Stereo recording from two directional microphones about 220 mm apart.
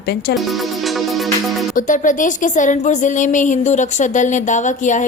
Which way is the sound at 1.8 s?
35° left (ahead or behind).